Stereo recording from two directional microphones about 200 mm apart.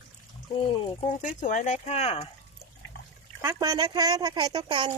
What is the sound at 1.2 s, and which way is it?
Speech, 40° left (ahead or behind).